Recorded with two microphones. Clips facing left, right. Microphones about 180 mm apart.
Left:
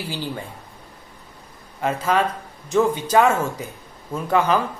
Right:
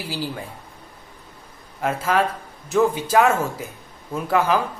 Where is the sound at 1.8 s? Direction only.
5° right (ahead or behind).